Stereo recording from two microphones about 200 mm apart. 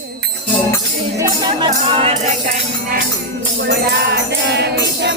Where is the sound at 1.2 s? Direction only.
25° right (ahead or behind).